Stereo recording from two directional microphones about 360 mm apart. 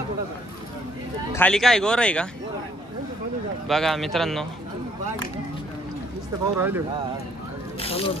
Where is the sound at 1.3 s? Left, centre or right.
Centre.